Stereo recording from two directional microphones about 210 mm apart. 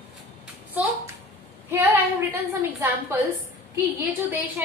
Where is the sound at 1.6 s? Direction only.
10° right (ahead or behind).